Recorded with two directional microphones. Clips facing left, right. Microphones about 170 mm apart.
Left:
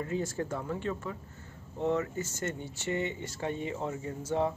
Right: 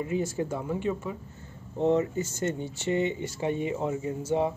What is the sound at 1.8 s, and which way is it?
Speech, 25° right (ahead or behind).